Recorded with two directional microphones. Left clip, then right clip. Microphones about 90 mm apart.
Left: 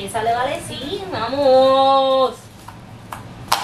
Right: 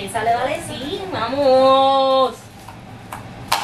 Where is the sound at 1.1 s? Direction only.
15° left (ahead or behind).